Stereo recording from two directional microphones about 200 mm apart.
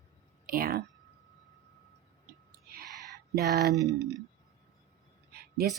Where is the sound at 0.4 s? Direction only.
45° right (ahead or behind).